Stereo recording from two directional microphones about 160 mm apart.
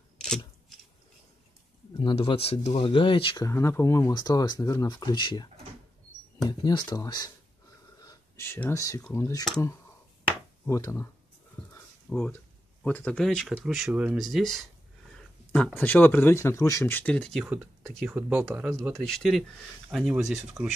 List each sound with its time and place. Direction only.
2.0 s speech: 30° left (ahead or behind)
10.6 s speech: 15° left (ahead or behind)
12.1 s speech: 5° left (ahead or behind)
18.5 s speech: 15° right (ahead or behind)
18.8 s speech: centre (ahead or behind)